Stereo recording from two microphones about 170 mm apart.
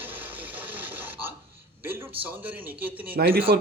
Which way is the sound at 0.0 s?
10° right (ahead or behind).